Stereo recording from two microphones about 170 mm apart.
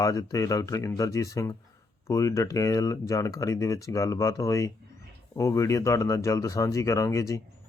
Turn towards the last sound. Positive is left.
turn(degrees=20)  # may be behind; listen again after turning